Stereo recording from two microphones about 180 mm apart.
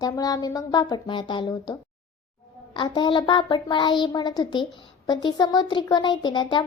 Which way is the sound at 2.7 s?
25° left (ahead or behind).